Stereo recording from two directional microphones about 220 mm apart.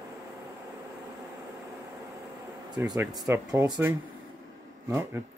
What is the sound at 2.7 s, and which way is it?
Speech, 15° right (ahead or behind).